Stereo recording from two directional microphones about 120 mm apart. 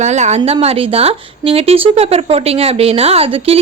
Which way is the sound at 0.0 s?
75° right (ahead or behind).